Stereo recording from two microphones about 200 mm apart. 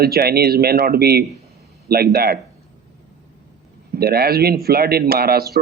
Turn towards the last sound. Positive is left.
turn(degrees=-50)  # may be behind; listen again after turning